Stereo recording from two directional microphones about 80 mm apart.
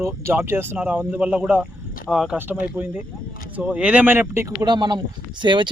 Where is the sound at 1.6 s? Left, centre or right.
Centre.